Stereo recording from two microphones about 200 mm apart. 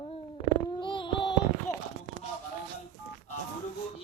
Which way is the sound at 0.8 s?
25° left (ahead or behind).